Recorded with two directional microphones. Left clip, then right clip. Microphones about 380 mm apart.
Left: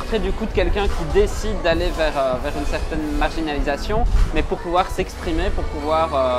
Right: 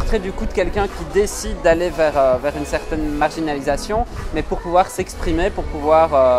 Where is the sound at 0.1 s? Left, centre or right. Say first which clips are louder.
Even; centre.